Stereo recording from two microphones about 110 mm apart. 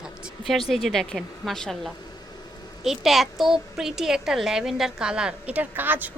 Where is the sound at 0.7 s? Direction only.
Centre (ahead or behind).